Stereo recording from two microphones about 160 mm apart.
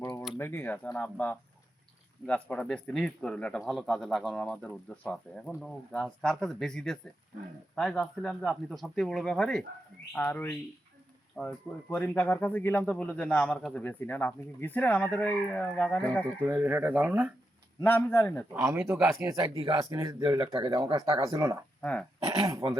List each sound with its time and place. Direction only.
0.0 s a sound: 25° left (ahead or behind)
0.3 s speech: 15° left (ahead or behind)
16.5 s speech: 10° right (ahead or behind)
17.7 s speech: 15° left (ahead or behind)
18.5 s speech: 15° right (ahead or behind)
21.8 s speech: 5° left (ahead or behind)
22.2 s speech: 40° right (ahead or behind)